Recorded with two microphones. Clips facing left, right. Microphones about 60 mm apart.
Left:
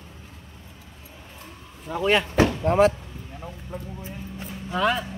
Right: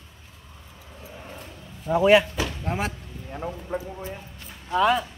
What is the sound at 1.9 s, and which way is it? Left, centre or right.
Speech, centre.